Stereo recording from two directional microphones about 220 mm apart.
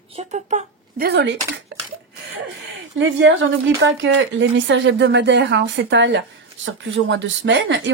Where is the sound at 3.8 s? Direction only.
60° right (ahead or behind).